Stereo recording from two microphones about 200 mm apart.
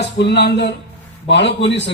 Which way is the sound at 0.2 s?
55° left (ahead or behind).